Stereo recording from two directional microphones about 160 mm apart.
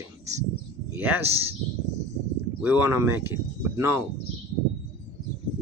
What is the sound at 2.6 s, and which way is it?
Speech, 15° right (ahead or behind).